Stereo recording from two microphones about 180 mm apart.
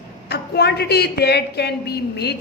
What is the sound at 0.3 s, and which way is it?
A woman's voice, 65° left (ahead or behind).